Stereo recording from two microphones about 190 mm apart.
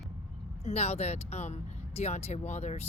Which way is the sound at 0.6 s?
35° left (ahead or behind).